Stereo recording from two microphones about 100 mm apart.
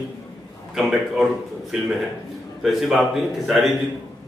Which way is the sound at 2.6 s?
5° right (ahead or behind).